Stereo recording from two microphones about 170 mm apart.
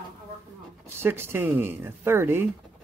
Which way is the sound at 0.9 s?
15° right (ahead or behind).